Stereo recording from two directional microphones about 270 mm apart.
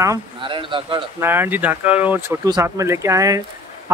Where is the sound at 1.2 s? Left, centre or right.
Centre.